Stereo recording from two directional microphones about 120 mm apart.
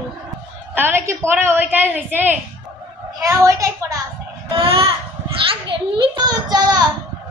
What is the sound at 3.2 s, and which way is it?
Speech, 30° right (ahead or behind).